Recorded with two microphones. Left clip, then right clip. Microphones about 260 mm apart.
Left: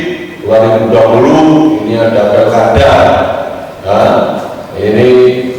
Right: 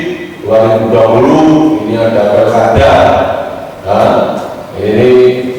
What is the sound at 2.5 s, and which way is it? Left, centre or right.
A man's voice, left.